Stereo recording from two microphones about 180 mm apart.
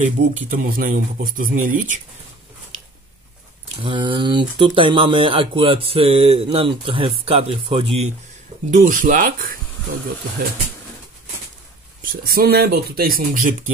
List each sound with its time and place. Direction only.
0.5 s speech: 50° right (ahead or behind)
3.8 s speech: 25° right (ahead or behind)
8.6 s speech: 45° right (ahead or behind)
12.0 s speech: 55° right (ahead or behind)